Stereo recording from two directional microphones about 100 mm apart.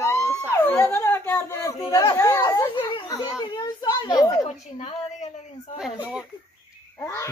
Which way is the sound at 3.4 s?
45° left (ahead or behind).